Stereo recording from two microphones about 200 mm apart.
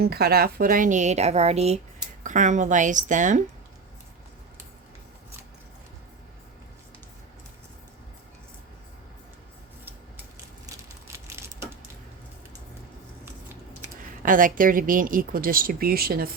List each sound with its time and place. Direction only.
0.0 s a woman's voice: 50° right (ahead or behind)
11.3 s a sound: 10° right (ahead or behind)
13.2 s scissors: 10° right (ahead or behind)
14.2 s speech: 45° right (ahead or behind)